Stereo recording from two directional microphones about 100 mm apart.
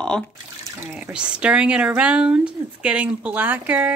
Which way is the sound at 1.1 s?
10° right (ahead or behind).